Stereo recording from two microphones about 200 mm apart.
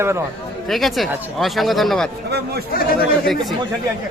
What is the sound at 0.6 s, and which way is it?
Speech, centre (ahead or behind).